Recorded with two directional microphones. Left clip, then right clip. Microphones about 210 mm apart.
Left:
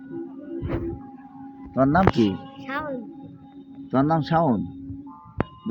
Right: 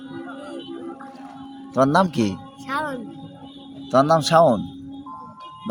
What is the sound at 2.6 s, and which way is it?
Music, 15° right (ahead or behind).